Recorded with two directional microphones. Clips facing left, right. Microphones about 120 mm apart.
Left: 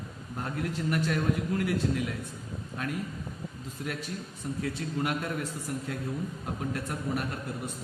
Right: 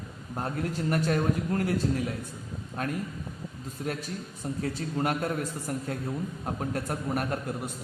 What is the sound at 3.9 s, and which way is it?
A man's voice, 40° right (ahead or behind).